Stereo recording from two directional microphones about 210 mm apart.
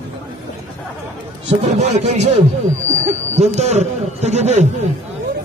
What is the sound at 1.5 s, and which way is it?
Speech, 30° right (ahead or behind).